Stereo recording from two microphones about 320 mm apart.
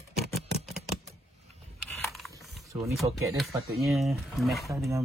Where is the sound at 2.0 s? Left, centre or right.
Centre.